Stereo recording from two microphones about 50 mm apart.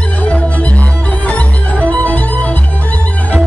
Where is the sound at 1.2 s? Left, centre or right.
Left.